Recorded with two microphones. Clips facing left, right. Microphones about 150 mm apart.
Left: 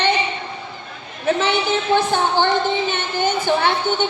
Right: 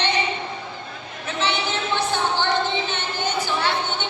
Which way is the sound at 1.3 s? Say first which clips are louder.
Left 7 dB; 50° left (ahead or behind).